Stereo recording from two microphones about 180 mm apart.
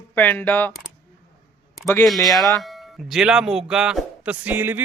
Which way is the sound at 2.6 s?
Centre (ahead or behind).